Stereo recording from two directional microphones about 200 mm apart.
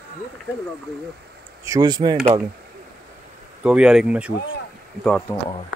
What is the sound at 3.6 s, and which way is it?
Speech, 5° right (ahead or behind).